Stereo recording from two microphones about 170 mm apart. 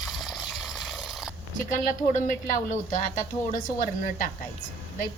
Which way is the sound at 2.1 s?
45° left (ahead or behind).